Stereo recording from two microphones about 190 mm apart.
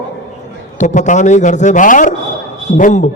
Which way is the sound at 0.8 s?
40° left (ahead or behind).